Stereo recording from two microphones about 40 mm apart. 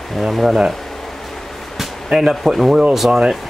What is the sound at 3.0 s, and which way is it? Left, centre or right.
Speech, right.